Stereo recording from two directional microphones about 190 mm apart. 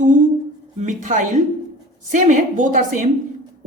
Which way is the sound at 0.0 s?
40° right (ahead or behind).